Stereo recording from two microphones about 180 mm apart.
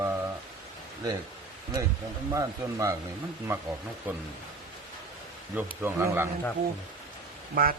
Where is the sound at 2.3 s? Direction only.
15° right (ahead or behind).